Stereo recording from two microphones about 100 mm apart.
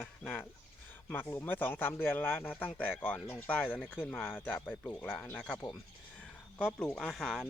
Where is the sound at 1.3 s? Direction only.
20° left (ahead or behind).